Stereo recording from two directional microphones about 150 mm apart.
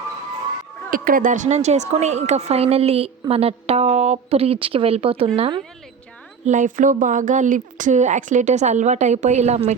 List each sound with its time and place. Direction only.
0.9 s a woman's voice: 70° right (ahead or behind); by 5.6 s 30° right (ahead or behind)
6.4 s speech: 55° right (ahead or behind)